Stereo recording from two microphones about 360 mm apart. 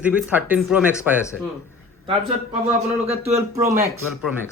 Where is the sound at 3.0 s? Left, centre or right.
Centre.